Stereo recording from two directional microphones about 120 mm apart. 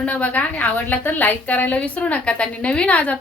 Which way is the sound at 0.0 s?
10° left (ahead or behind).